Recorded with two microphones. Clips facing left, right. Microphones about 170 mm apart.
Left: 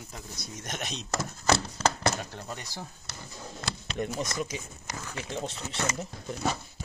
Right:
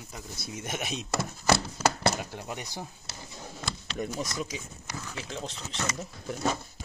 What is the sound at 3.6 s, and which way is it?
Speech, centre (ahead or behind).